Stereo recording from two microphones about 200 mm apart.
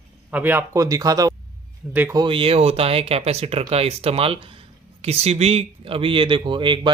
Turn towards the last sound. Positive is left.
turn(degrees=-25)  # may be behind; listen again after turning